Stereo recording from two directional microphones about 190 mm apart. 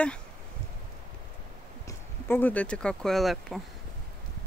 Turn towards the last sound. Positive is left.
turn(degrees=0)  # may be behind; listen again after turning